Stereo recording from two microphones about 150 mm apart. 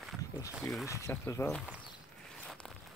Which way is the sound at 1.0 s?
20° left (ahead or behind).